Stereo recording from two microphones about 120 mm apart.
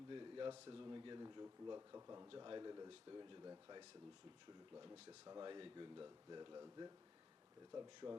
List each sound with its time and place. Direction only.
0.1 s a sound: 40° right (ahead or behind)
0.7 s speech: 40° right (ahead or behind)
2.4 s speech: 35° right (ahead or behind)
4.7 s speech: 25° right (ahead or behind)